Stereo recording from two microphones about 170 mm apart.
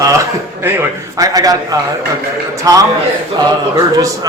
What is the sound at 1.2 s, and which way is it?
Speech, 20° right (ahead or behind).